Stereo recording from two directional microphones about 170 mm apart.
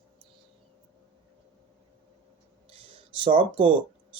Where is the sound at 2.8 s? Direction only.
30° right (ahead or behind).